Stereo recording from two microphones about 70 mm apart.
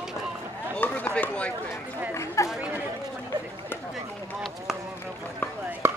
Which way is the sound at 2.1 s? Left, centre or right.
Left.